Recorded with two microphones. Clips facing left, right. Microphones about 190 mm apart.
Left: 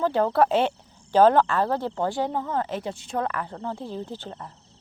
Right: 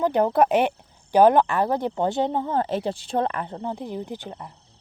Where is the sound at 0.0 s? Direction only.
15° right (ahead or behind).